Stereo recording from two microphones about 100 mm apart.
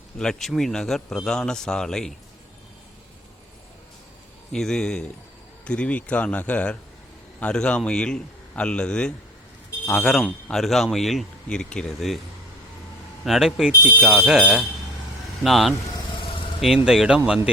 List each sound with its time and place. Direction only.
0.2 s a man's voice: 5° left (ahead or behind)
4.5 s a man's voice: 5° left (ahead or behind)
13.2 s a man's voice: 5° right (ahead or behind)
16.1 s vehicle: 60° left (ahead or behind)
16.6 s a man's voice: 5° right (ahead or behind)